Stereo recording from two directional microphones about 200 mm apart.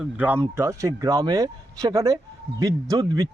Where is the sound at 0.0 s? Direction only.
10° right (ahead or behind).